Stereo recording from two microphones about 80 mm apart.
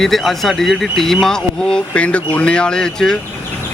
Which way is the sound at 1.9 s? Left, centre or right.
Centre.